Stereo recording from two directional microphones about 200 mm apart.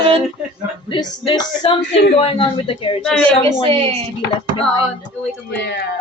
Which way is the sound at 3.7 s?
25° right (ahead or behind).